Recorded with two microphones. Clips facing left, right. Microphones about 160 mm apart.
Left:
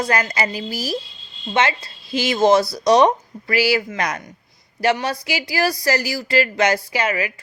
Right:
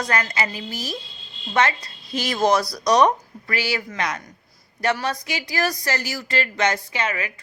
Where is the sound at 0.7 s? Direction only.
10° left (ahead or behind).